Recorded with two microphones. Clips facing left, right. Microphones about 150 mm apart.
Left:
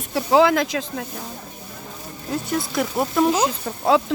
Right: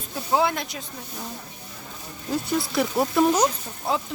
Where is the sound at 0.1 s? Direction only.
85° left.